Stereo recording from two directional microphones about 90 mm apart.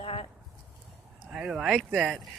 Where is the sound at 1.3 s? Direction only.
10° right (ahead or behind).